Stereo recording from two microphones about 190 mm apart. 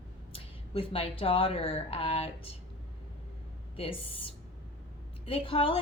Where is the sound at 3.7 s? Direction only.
30° left (ahead or behind).